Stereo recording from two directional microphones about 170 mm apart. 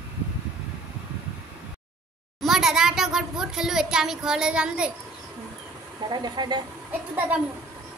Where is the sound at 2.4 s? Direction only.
Centre (ahead or behind).